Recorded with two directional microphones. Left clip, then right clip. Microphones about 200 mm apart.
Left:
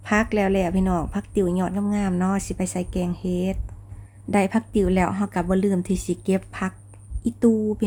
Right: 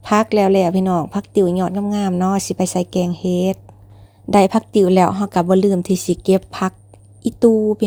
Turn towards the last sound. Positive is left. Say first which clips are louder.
# right 8 dB
turn(degrees=-20)  # may be behind; listen again after turning